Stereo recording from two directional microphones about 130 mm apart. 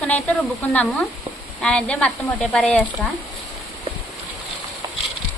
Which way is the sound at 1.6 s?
10° left (ahead or behind).